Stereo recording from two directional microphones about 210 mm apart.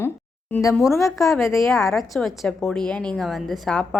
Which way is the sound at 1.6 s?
Centre (ahead or behind).